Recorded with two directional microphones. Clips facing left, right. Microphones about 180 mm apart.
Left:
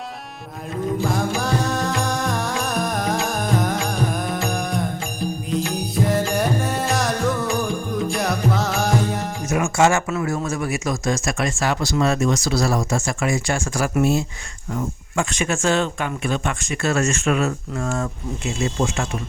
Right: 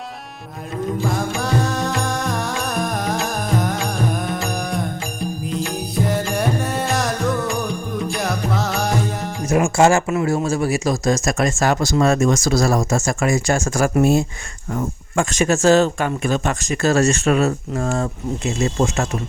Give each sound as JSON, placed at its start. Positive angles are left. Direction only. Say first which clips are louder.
{"t": 1.0, "sound": "music", "louder": "even", "side_deg": 0}
{"t": 9.5, "sound": "speech", "louder": "right 3 dB", "side_deg": -35}